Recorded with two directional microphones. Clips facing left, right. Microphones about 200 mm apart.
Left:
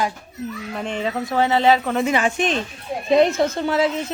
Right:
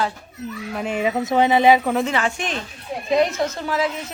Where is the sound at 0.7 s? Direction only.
5° right (ahead or behind).